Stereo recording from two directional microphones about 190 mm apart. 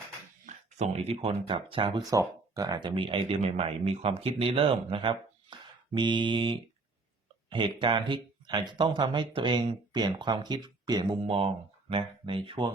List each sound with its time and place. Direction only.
0.4 s speech: 35° right (ahead or behind)